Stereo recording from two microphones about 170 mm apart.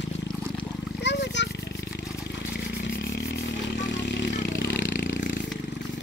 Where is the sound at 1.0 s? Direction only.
90° left.